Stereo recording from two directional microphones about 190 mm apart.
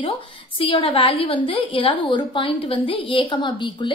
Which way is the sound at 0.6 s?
30° left (ahead or behind).